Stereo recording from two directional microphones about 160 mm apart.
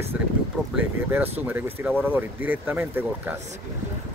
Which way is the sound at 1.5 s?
10° right (ahead or behind).